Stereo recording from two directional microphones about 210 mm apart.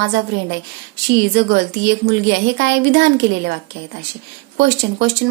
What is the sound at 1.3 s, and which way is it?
Speech, 55° right (ahead or behind).